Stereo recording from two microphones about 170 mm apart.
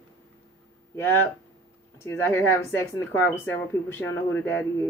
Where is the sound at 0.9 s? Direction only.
15° left (ahead or behind).